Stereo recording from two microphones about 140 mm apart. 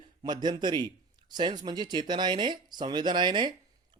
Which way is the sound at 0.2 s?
30° right (ahead or behind).